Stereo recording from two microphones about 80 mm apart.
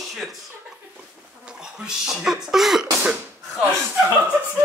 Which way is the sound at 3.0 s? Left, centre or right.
Centre.